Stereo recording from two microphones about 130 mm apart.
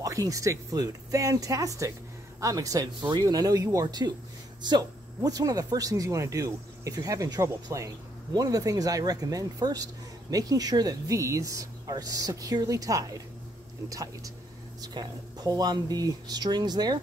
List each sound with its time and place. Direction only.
0.0 s speech: 25° right (ahead or behind)